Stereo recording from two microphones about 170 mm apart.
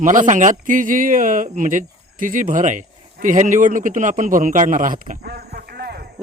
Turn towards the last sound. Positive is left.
turn(degrees=-70)  # may be behind; listen again after turning